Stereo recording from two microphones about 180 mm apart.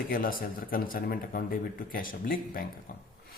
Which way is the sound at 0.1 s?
50° left (ahead or behind).